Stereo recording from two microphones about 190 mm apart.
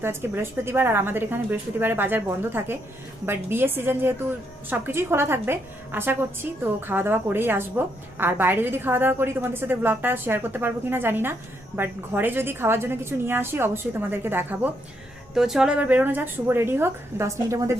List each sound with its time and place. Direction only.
0.0 s a woman's voice: 10° right (ahead or behind)